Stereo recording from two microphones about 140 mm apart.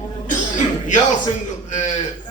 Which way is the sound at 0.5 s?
60° left (ahead or behind).